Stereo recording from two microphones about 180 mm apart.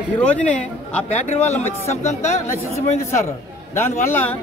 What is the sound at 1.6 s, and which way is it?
Speech, 40° left (ahead or behind).